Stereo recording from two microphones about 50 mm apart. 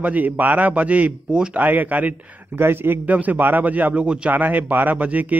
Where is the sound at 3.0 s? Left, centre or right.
Right.